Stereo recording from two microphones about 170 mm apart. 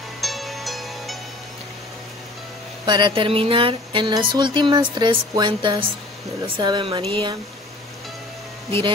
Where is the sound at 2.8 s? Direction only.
25° right (ahead or behind).